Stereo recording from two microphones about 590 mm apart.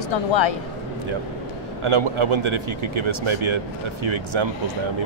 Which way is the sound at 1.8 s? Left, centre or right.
Right.